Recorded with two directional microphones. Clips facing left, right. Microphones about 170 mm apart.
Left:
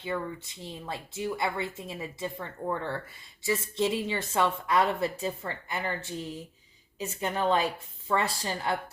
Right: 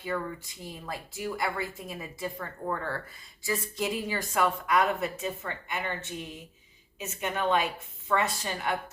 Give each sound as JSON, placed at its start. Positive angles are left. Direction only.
{"t": 0.0, "sound": "a woman's voice", "side_deg": 25}